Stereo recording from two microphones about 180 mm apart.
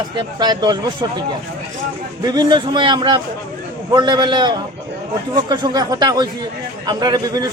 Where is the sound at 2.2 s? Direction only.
25° right (ahead or behind).